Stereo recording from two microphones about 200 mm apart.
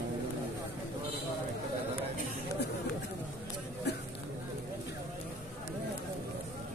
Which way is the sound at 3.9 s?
55° left (ahead or behind).